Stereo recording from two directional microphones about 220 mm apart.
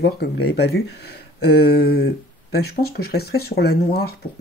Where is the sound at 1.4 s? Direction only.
45° left (ahead or behind).